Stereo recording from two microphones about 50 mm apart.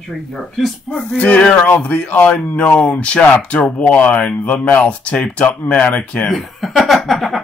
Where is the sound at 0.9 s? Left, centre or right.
Left.